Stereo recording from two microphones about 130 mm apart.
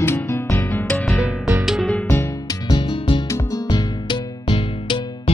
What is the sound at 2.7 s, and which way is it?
Music, 35° left (ahead or behind).